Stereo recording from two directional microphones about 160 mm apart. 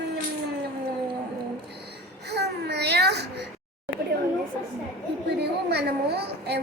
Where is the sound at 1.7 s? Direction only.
90° right.